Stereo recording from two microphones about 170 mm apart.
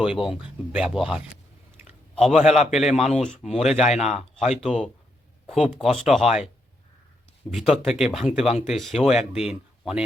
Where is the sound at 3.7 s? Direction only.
40° left (ahead or behind).